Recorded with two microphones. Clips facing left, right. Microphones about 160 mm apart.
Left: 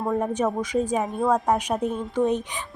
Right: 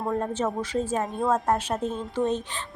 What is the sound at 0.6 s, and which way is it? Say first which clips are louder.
Speech: left 3 dB; 10° left (ahead or behind).